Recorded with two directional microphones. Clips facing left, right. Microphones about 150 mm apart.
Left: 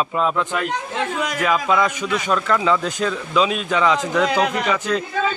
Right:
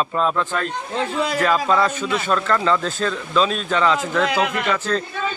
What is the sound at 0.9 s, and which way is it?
Speech, 30° right (ahead or behind).